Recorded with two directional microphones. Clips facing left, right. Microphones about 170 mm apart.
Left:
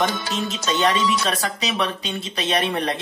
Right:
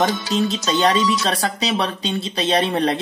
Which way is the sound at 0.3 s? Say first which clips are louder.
Right 5 dB; 35° right (ahead or behind).